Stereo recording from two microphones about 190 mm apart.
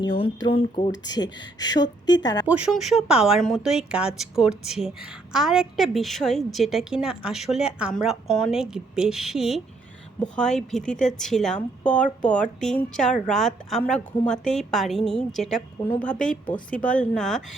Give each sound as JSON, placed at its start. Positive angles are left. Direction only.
{"t": 0.2, "sound": "speech", "side_deg": 25}
{"t": 2.5, "sound": "a woman's voice", "side_deg": -5}